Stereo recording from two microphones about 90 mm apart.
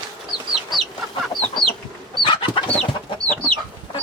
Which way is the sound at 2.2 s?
65° left (ahead or behind).